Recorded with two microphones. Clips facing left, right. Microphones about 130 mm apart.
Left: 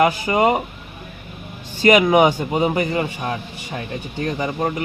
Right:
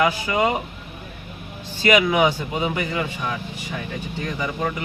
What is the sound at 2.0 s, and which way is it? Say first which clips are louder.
A man's voice: left 4 dB; 40° left (ahead or behind).